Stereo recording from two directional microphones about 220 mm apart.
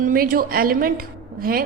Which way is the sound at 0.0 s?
40° right (ahead or behind).